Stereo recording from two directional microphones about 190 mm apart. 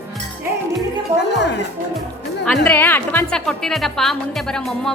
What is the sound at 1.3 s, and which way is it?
Music, 65° left (ahead or behind).